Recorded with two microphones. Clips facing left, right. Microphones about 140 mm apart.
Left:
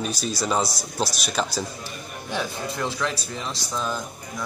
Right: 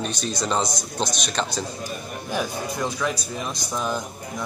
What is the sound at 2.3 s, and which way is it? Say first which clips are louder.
A man's voice: right 2 dB; 10° right (ahead or behind).